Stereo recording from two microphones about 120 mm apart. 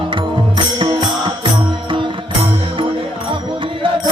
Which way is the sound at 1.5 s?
40° right (ahead or behind).